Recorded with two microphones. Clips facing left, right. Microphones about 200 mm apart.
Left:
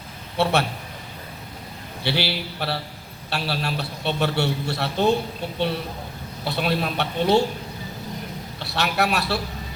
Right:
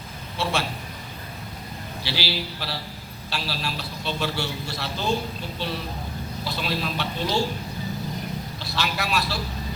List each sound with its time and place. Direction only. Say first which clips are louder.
0.4 s a man's voice: left 6 dB; 60° left (ahead or behind)
2.0 s a man's voice: left 4 dB; 60° left (ahead or behind)
8.5 s a man's voice: left 7 dB; 60° left (ahead or behind)